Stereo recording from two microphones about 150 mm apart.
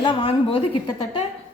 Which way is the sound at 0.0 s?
35° left (ahead or behind).